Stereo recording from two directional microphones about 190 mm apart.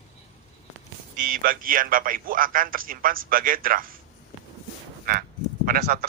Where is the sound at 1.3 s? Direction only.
50° right (ahead or behind).